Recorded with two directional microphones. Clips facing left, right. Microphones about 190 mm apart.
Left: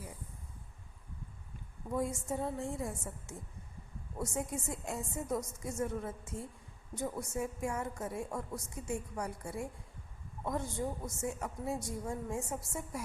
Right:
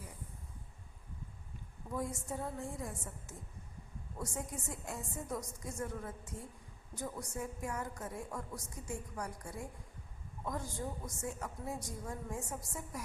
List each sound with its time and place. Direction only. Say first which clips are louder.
1.9 s a woman's voice: left 4 dB; 25° left (ahead or behind)
10.8 s a woman's voice: left 4 dB; 25° left (ahead or behind)